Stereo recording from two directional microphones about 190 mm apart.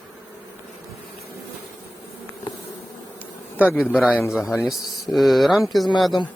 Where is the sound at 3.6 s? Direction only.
10° left (ahead or behind).